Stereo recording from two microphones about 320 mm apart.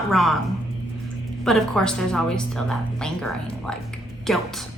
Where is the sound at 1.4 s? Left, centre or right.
Centre.